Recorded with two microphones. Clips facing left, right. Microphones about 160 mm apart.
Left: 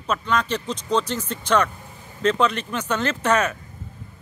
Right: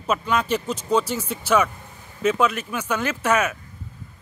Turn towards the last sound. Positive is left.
turn(degrees=-10)  # may be behind; listen again after turning